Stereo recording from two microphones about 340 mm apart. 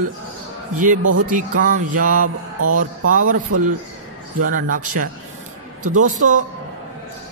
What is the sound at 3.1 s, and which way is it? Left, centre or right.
Speech, right.